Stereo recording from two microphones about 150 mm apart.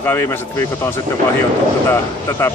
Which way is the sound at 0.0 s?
15° left (ahead or behind).